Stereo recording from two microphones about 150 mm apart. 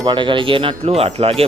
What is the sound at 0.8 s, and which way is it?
Speech, 45° right (ahead or behind).